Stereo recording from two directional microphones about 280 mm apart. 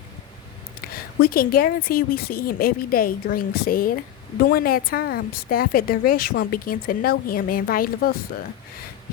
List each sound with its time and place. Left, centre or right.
1.2 s speech: left